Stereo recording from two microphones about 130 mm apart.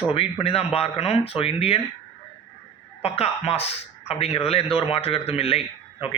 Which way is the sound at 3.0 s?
50° left (ahead or behind).